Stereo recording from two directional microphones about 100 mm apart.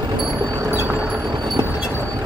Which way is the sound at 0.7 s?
20° right (ahead or behind).